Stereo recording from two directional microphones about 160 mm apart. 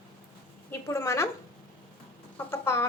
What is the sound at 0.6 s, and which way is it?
Speech, 20° left (ahead or behind).